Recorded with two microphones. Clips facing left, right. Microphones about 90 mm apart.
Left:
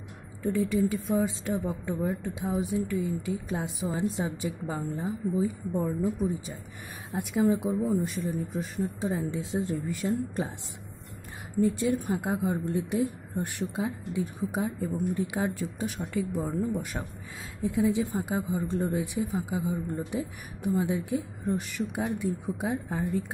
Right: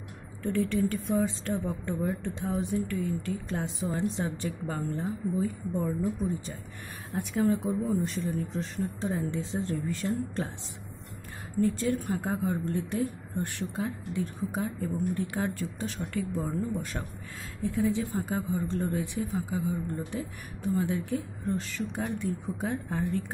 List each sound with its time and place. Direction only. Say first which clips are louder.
0.6 s speech: left 1 dB; 10° left (ahead or behind)
11.5 s speech: left 2 dB; 15° left (ahead or behind)